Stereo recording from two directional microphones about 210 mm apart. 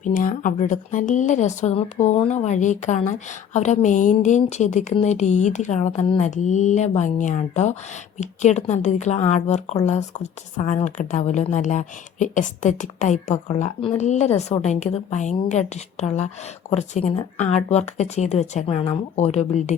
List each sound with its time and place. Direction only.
0.0 s speech: 40° left (ahead or behind)